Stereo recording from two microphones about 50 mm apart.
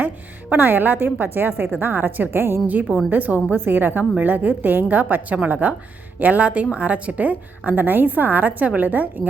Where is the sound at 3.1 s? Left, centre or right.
Right.